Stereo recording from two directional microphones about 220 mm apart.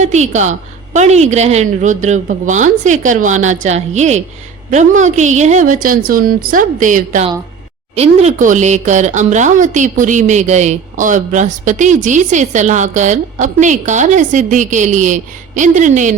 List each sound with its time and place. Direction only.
0.0 s speech: 30° right (ahead or behind)